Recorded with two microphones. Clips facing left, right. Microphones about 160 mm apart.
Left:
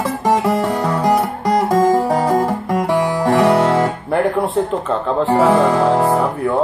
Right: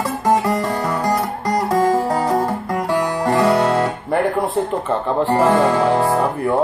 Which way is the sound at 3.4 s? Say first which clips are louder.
Left 2 dB; 15° left (ahead or behind).